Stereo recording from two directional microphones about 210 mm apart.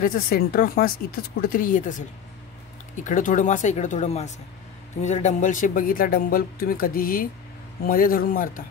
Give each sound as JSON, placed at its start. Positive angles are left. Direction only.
{"t": 0.0, "sound": "a man's voice", "side_deg": 45}